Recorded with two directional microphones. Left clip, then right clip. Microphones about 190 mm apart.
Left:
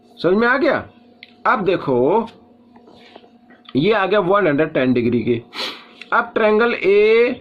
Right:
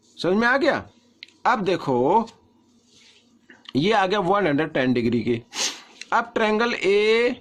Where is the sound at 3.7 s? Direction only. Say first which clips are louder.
Left 4 dB; 40° right (ahead or behind).